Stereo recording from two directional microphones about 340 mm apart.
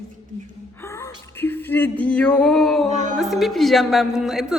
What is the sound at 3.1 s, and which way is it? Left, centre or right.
A woman's voice, centre.